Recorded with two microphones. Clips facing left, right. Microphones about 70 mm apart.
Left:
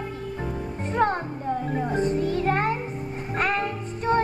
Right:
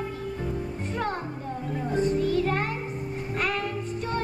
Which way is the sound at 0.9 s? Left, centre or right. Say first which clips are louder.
Left 8 dB; left.